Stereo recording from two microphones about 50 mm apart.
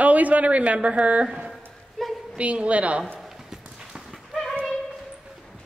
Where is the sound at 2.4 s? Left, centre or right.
Right.